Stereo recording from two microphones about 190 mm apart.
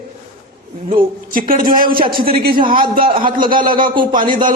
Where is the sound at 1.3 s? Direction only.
45° right (ahead or behind).